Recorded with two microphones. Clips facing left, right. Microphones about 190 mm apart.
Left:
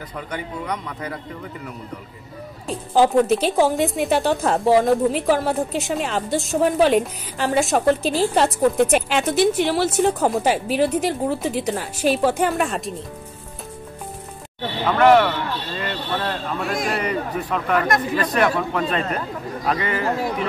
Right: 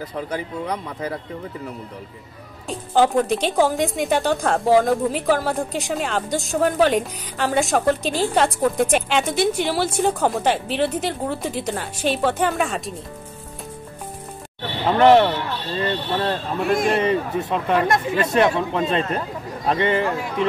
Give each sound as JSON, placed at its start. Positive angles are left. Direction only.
{"t": 2.7, "sound": "speech", "side_deg": 5}
{"t": 14.9, "sound": "speech", "side_deg": -30}